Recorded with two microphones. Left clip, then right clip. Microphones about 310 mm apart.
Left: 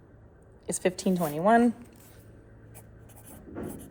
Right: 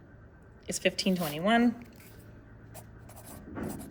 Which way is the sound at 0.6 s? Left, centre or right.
Centre.